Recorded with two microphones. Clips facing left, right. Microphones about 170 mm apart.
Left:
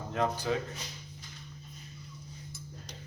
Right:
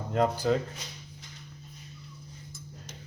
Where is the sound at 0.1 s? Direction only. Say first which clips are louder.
Right 5 dB; 45° right (ahead or behind).